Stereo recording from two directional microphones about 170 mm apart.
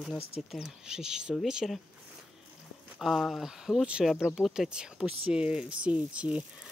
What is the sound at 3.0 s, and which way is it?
Speech, centre (ahead or behind).